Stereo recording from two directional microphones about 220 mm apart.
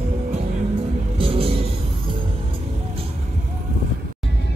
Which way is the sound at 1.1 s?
25° right (ahead or behind).